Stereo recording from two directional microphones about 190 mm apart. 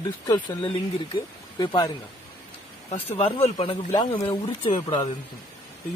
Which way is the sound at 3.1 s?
30° left (ahead or behind).